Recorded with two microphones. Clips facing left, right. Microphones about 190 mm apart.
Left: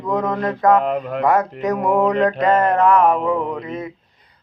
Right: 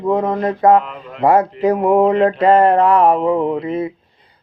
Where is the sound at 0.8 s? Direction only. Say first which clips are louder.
Left 6 dB; 50° left (ahead or behind).